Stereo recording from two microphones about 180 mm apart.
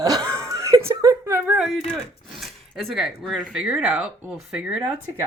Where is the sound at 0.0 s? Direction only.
20° right (ahead or behind); by 3.1 s centre (ahead or behind).